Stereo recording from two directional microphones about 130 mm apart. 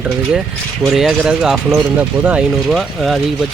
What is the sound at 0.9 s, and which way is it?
Speech, 5° right (ahead or behind).